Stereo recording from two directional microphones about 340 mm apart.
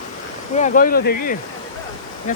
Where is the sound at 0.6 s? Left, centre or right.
Left.